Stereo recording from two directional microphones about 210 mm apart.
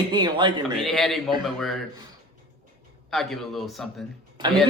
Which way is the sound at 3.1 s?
Centre (ahead or behind).